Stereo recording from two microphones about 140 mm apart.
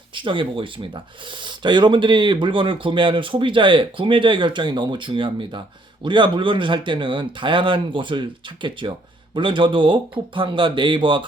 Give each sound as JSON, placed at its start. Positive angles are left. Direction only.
{"t": 0.1, "sound": "speech", "side_deg": -35}